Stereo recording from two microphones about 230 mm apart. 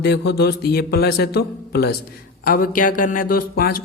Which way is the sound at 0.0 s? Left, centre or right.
Left.